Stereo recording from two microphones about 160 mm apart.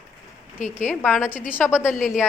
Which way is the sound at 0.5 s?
50° left (ahead or behind).